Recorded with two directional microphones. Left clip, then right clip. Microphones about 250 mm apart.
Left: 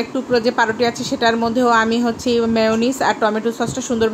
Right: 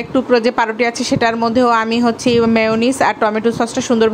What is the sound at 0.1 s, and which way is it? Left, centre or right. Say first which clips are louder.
A woman's voice: right 6 dB; right.